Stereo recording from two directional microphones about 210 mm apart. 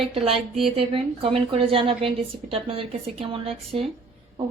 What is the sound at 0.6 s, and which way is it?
A woman's voice, 25° right (ahead or behind).